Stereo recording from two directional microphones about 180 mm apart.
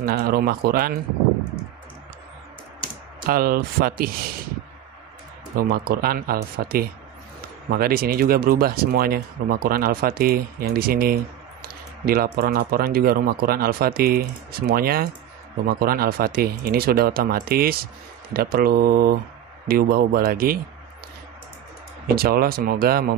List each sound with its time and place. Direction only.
0.0 s speech: 55° right (ahead or behind)
3.3 s speech: 55° right (ahead or behind)
5.6 s speech: 55° right (ahead or behind)
22.1 s speech: 55° right (ahead or behind)